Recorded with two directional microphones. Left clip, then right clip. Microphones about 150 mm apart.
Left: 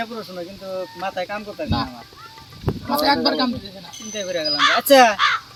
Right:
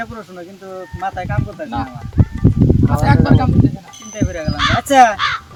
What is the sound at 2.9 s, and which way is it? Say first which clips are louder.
Speech: left 2 dB; 10° right (ahead or behind).